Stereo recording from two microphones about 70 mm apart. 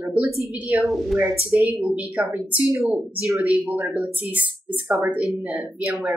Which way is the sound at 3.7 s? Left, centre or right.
Centre.